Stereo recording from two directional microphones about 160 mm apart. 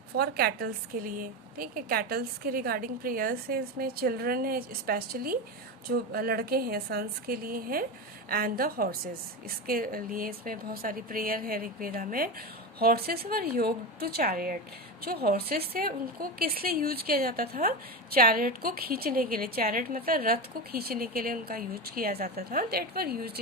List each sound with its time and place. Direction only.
0.1 s a woman's voice: 75° right (ahead or behind)